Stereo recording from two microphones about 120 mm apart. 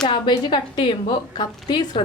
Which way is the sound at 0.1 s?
40° left (ahead or behind).